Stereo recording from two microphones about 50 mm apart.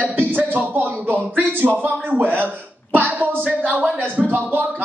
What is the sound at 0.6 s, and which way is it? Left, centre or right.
Speech, right.